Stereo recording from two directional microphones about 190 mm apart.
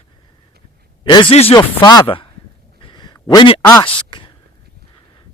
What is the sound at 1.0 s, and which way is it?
Speech, 25° left (ahead or behind).